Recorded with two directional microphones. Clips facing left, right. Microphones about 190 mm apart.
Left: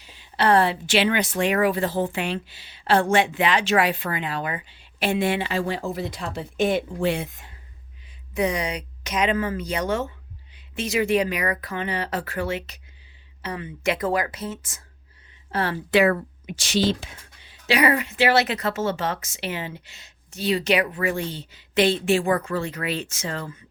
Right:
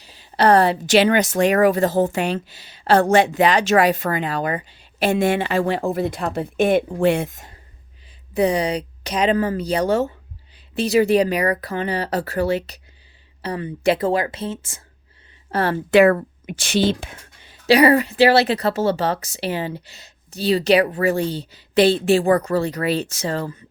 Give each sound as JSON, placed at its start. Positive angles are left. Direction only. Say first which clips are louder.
{"t": 0.0, "sound": "speech", "louder": "right 5 dB", "side_deg": -40}
{"t": 8.3, "sound": "speech", "louder": "right 6 dB", "side_deg": -35}
{"t": 15.4, "sound": "speech", "louder": "right 5 dB", "side_deg": -45}